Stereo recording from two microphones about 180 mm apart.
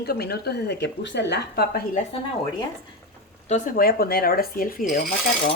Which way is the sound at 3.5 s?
50° left (ahead or behind).